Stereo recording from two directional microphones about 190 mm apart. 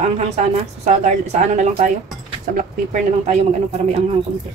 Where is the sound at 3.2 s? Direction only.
35° right (ahead or behind).